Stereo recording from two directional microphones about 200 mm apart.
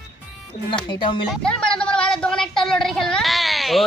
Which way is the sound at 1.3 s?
5° left (ahead or behind).